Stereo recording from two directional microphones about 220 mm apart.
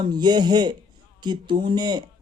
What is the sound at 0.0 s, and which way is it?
Speech, 20° right (ahead or behind).